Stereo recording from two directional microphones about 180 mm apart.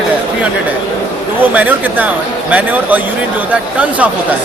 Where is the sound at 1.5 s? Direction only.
10° right (ahead or behind).